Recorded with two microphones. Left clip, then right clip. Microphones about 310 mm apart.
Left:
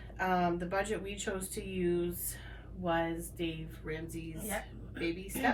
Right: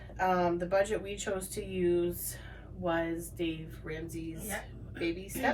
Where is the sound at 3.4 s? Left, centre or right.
Centre.